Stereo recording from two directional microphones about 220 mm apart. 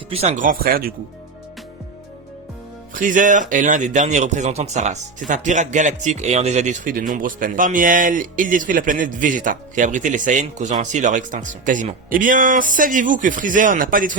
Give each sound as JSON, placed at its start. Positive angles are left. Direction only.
{"t": 0.1, "sound": "speech", "side_deg": -30}
{"t": 2.9, "sound": "speech", "side_deg": -35}